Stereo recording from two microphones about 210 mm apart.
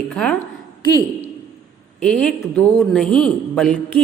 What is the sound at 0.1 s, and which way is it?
Speech, 5° left (ahead or behind).